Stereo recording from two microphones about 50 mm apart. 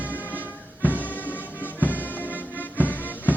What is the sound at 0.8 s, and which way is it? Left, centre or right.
Music, left.